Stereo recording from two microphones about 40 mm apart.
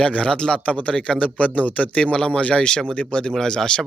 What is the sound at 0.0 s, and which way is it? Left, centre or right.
Speech, left.